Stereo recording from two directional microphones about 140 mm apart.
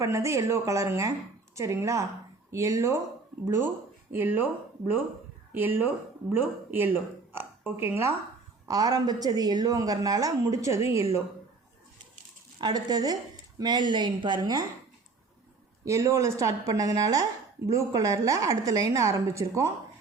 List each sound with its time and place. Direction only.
0.0 s a woman's voice: 20° right (ahead or behind)
5.5 s a woman's voice: 15° right (ahead or behind)
12.5 s a woman's voice: 30° right (ahead or behind)
15.8 s a woman's voice: 20° right (ahead or behind)